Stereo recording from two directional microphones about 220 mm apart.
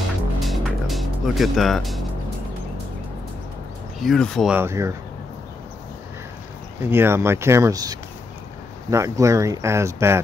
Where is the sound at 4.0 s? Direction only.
Centre (ahead or behind).